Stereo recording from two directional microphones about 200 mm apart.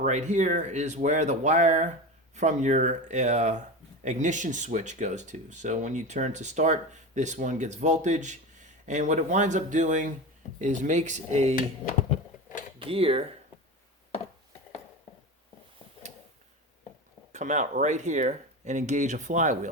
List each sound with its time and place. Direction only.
0.0 s speech: 35° right (ahead or behind)
12.9 s speech: 30° right (ahead or behind)
17.3 s speech: 40° right (ahead or behind)